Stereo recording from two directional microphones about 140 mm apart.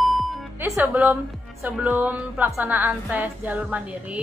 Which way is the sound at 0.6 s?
15° right (ahead or behind).